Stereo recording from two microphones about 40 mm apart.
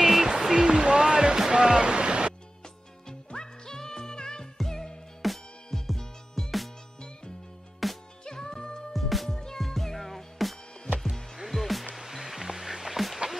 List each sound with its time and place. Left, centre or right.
0.0 s a sound: centre
1.5 s waterfall: right
3.1 s music: centre
4.6 s music: centre
7.8 s music: centre
8.3 s music: centre
8.9 s music: centre